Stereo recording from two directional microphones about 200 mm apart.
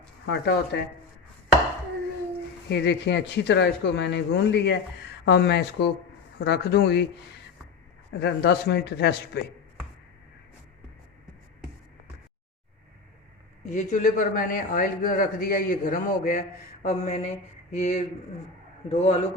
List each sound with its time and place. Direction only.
0.3 s speech: 55° left (ahead or behind)
2.6 s speech: 60° left (ahead or behind)
8.2 s speech: 55° left (ahead or behind)
13.7 s speech: 40° left (ahead or behind)
16.8 s a sound: 35° left (ahead or behind)